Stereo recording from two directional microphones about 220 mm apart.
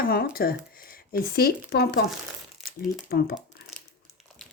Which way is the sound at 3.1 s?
45° left (ahead or behind).